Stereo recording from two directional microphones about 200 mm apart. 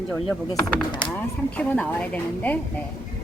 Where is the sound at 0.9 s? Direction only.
25° left (ahead or behind).